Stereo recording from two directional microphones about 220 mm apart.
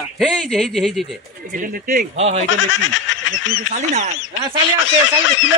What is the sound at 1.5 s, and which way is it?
Speech, 40° right (ahead or behind).